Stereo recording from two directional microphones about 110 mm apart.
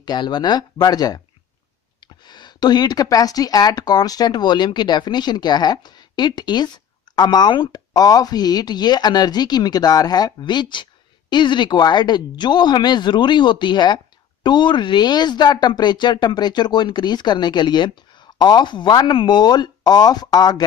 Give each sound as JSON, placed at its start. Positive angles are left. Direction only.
{"t": 0.0, "sound": "speech", "side_deg": 40}
{"t": 2.2, "sound": "speech", "side_deg": 40}